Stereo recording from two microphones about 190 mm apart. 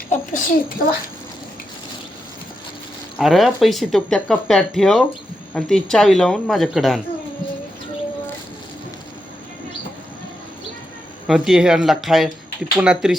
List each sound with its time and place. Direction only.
0.1 s a child's voice: 45° left (ahead or behind)
3.2 s speech: centre (ahead or behind)
11.3 s speech: centre (ahead or behind)